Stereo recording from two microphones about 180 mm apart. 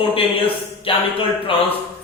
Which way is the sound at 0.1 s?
30° left (ahead or behind).